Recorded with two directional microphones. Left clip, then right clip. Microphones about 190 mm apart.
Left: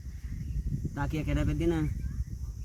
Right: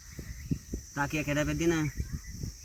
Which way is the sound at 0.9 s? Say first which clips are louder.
Right 4 dB; 20° left (ahead or behind).